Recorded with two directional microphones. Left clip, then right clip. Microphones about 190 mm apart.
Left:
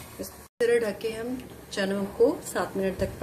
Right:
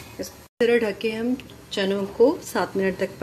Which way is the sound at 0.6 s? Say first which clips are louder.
Right 4 dB; 25° right (ahead or behind).